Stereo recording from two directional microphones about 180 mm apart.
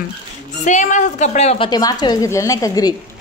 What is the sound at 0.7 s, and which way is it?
A woman's voice, 40° left (ahead or behind).